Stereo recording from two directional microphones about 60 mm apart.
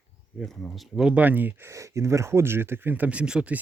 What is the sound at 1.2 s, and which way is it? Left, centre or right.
Speech, right.